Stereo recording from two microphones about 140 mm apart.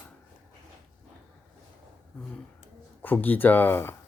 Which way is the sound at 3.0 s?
10° left (ahead or behind).